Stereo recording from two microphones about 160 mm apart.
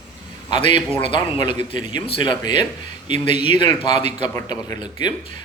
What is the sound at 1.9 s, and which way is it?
Speech, 30° left (ahead or behind).